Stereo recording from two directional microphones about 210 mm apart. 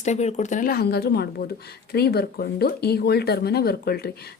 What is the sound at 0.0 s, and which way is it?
Speech, 30° left (ahead or behind).